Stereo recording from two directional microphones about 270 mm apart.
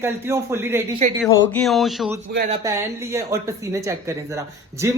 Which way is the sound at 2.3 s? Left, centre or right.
Right.